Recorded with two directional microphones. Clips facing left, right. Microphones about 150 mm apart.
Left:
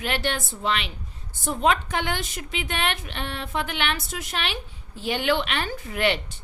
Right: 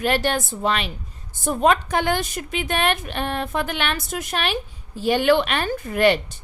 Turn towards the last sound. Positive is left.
turn(degrees=-45)  # may be behind; listen again after turning